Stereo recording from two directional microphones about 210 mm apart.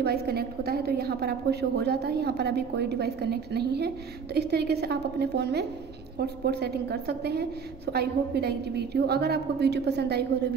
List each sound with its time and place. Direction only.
0.0 s a woman's voice: 50° right (ahead or behind)